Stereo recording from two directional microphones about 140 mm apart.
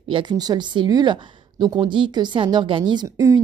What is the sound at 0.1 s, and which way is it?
Speech, 30° right (ahead or behind).